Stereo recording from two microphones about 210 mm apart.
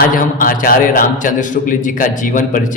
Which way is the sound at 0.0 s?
40° left (ahead or behind).